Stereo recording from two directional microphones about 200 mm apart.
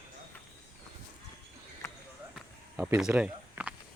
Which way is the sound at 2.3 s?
5° right (ahead or behind).